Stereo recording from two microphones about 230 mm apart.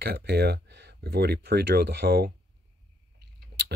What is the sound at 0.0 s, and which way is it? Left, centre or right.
Speech, right.